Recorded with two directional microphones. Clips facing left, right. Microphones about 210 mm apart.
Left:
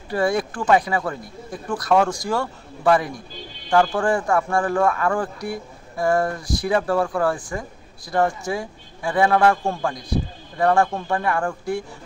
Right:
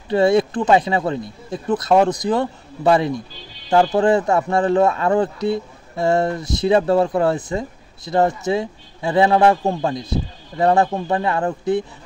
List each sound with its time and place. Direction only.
0.1 s speech: 25° right (ahead or behind)